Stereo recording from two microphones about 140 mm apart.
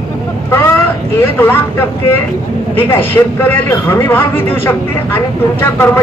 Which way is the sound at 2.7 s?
15° left (ahead or behind).